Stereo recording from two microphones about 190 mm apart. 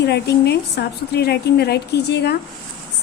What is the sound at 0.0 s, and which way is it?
A woman's voice, 60° left (ahead or behind).